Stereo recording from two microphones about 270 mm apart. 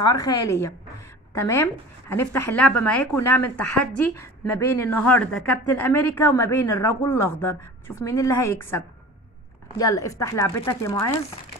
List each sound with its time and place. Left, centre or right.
0.0 s speech: centre